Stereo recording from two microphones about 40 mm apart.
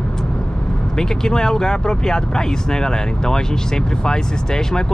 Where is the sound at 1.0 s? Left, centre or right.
Centre.